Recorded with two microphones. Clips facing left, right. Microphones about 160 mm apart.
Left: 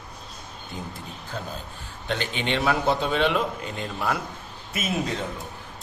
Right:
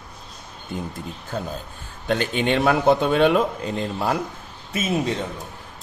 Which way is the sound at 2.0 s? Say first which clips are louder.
Right 6 dB; 45° right (ahead or behind).